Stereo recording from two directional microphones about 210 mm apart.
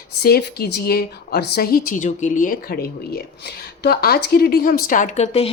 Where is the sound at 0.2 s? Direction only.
50° left (ahead or behind).